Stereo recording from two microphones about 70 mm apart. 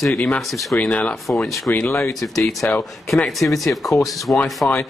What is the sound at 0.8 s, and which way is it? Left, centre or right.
Speech, centre.